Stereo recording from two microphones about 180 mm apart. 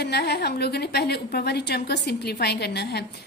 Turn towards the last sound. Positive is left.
turn(degrees=65)  # may be behind; listen again after turning